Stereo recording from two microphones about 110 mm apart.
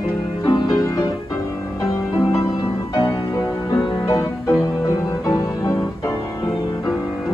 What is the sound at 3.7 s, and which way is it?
Music, 30° left (ahead or behind).